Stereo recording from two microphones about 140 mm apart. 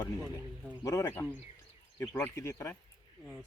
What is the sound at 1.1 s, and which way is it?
Speech, 10° left (ahead or behind).